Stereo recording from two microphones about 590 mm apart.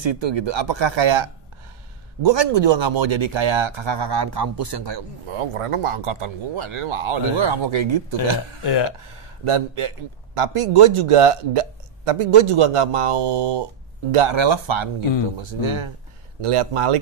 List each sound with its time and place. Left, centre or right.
0.0 s speech: right
9.4 s a man's voice: right